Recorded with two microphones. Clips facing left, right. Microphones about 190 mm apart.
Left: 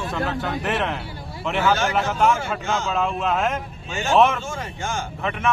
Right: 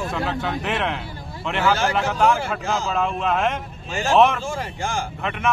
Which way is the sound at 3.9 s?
35° right (ahead or behind).